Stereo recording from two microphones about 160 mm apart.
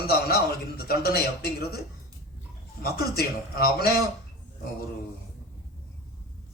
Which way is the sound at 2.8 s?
80° left.